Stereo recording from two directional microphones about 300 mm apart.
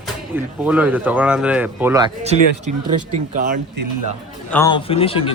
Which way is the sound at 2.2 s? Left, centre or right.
Right.